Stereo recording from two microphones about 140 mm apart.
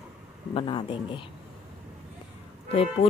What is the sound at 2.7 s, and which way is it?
Speech, 45° left (ahead or behind).